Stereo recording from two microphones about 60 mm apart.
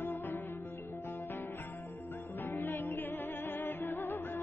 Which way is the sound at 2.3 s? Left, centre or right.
Left.